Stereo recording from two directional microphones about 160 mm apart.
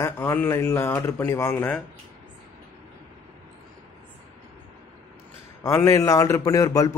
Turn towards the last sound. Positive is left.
turn(degrees=20)  # may be behind; listen again after turning